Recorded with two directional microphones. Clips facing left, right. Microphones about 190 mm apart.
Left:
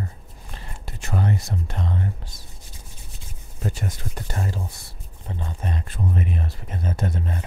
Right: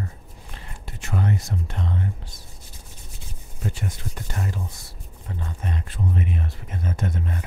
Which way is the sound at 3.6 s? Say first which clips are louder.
Left 1 dB; 40° left (ahead or behind).